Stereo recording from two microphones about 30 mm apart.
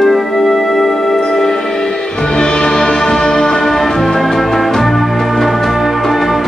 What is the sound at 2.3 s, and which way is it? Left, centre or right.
Music, left.